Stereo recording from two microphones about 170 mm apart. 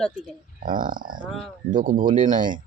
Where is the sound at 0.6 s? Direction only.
55° right (ahead or behind).